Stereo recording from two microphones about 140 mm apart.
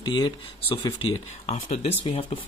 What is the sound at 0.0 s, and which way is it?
Speech, 35° left (ahead or behind).